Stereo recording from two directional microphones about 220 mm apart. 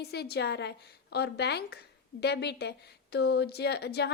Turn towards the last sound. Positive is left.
turn(degrees=50)  # may be behind; listen again after turning